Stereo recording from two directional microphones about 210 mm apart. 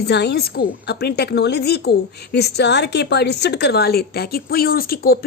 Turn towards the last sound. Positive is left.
turn(degrees=45)  # may be behind; listen again after turning